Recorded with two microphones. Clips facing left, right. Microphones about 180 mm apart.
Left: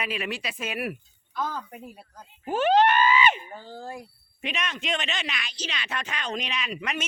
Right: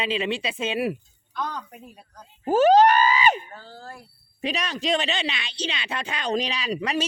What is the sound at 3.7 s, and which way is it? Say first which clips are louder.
Speech: left 5 dB; 15° left (ahead or behind).